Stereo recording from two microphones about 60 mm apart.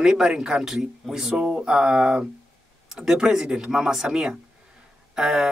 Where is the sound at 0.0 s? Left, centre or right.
Centre.